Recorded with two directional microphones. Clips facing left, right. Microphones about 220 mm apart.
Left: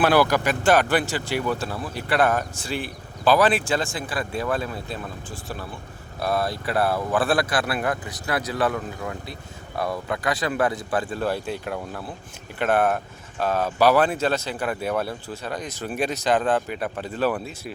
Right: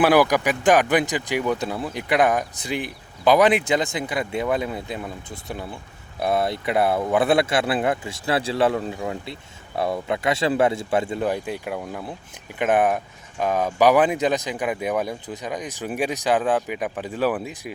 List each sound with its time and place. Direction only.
0.0 s speech: 10° right (ahead or behind)
6.1 s speech: 20° right (ahead or behind)